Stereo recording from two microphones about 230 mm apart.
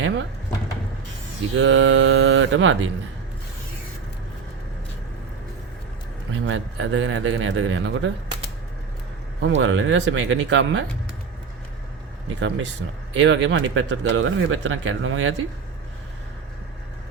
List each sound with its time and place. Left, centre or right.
1.5 s speech: right
6.4 s speech: right
9.4 s speech: right
12.4 s speech: right